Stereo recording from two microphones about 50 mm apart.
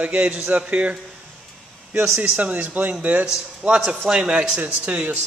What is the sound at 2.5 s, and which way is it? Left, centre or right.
Speech, right.